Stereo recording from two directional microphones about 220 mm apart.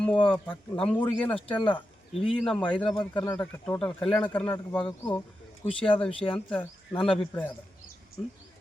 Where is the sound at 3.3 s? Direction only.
10° left (ahead or behind).